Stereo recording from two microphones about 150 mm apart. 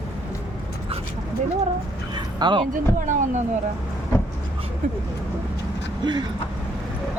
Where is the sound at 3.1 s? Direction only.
55° right (ahead or behind).